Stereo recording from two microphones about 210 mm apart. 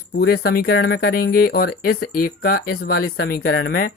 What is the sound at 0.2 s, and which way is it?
Speech, 50° left (ahead or behind).